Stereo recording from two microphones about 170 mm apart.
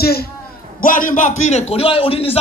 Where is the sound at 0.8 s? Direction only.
55° left (ahead or behind); by 2.4 s 35° left (ahead or behind).